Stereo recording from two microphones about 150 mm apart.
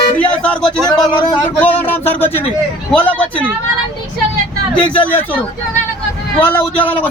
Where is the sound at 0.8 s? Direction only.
30° left (ahead or behind).